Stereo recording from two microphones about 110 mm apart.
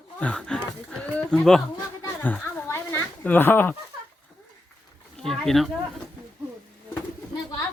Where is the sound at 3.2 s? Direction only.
20° left (ahead or behind).